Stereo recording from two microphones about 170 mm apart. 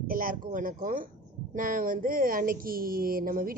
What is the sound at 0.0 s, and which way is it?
A woman's voice, 55° right (ahead or behind).